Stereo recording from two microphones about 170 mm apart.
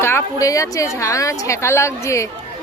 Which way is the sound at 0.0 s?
15° left (ahead or behind).